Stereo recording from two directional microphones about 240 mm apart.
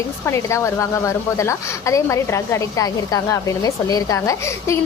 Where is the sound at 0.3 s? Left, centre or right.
Centre.